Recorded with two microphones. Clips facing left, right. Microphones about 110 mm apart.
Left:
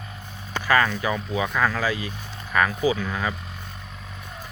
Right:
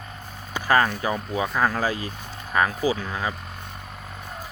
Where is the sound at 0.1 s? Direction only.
40° right (ahead or behind).